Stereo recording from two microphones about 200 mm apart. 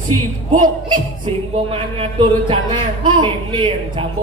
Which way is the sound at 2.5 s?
25° right (ahead or behind).